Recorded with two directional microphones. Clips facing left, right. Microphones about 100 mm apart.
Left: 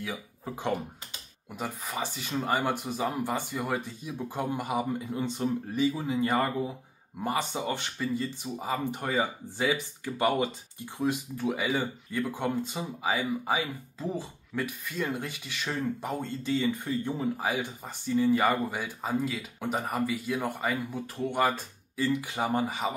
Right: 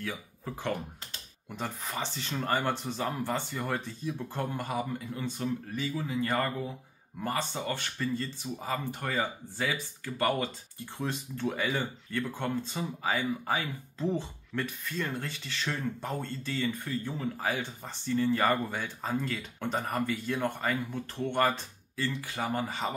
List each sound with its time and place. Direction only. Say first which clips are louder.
0.0 s speech: left 1 dB; 15° left (ahead or behind)